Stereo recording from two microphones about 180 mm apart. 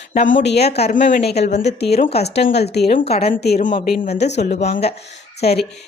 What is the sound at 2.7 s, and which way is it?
Speech, 65° left (ahead or behind).